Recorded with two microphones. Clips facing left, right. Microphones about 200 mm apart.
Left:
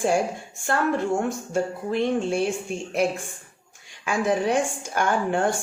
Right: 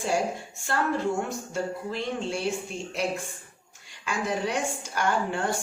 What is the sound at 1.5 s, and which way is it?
Speech, 55° left (ahead or behind).